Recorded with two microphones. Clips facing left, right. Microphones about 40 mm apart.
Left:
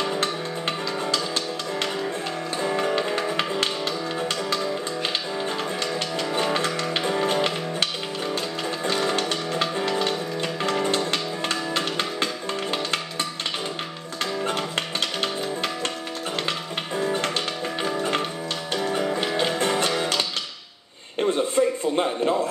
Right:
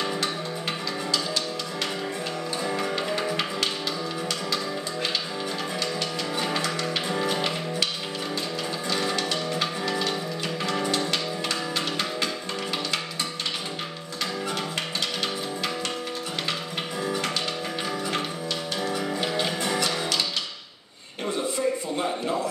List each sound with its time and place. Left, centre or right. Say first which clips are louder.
2.6 s music: left 5 dB; left
6.5 s music: left 3 dB; left
9.1 s music: left 2 dB; left
14.4 s music: left 3 dB; left
16.9 s music: left 4 dB; left
21.2 s a sound: left 6 dB; left